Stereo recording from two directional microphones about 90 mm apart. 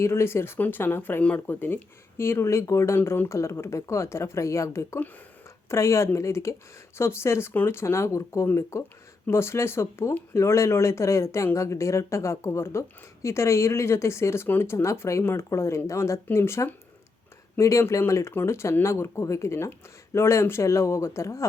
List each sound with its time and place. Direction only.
0.0 s speech: 30° left (ahead or behind)